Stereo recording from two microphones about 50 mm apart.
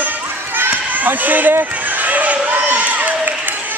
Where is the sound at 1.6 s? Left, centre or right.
Right.